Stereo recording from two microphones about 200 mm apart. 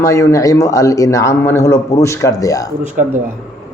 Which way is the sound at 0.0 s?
15° left (ahead or behind).